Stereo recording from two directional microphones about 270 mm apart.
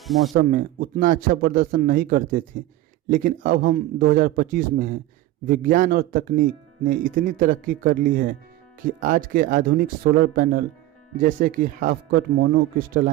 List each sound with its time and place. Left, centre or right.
0.0 s speech: centre
0.3 s speech: right